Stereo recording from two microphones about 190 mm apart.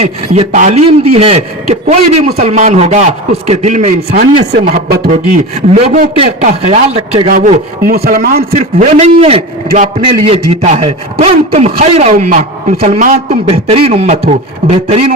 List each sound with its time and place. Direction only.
0.0 s a man's voice: 40° right (ahead or behind)
4.1 s a man's voice: 55° right (ahead or behind)
5.1 s a man's voice: 35° right (ahead or behind)
7.3 s a man's voice: 50° right (ahead or behind)
8.5 s a man's voice: 35° right (ahead or behind)